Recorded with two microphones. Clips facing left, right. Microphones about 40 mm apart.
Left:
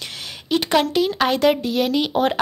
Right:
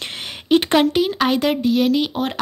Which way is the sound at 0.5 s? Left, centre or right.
Right.